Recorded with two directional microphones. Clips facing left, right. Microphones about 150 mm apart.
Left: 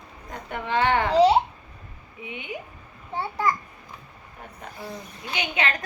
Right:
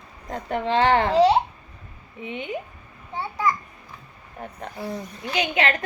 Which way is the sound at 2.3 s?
35° right (ahead or behind).